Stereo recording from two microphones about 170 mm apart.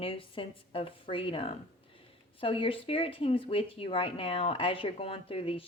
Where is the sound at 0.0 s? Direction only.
30° left (ahead or behind).